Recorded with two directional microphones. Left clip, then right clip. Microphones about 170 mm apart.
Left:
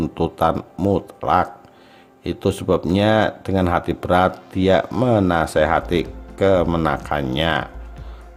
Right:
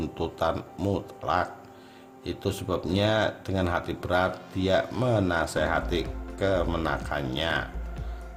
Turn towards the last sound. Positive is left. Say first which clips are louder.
# left 8 dB
turn(degrees=45)  # may be behind; listen again after turning